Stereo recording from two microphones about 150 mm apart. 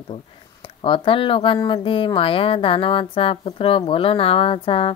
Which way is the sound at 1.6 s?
35° left (ahead or behind).